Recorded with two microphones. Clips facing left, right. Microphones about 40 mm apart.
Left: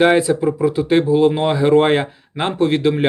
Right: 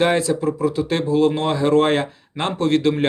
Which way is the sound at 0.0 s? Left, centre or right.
Centre.